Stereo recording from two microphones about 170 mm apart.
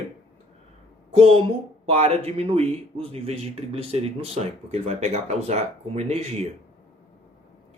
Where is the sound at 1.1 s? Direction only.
35° right (ahead or behind).